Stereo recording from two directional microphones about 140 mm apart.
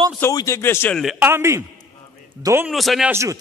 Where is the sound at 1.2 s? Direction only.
15° right (ahead or behind).